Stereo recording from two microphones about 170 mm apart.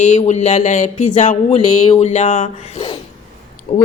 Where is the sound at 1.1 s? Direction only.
45° left (ahead or behind).